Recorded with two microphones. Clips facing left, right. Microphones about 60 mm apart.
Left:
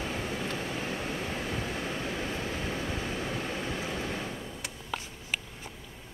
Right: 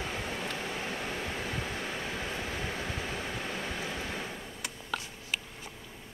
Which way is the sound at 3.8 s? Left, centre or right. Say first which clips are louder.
Left 2 dB; centre.